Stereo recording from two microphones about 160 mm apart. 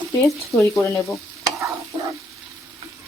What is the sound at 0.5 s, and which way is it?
Speech, 20° left (ahead or behind).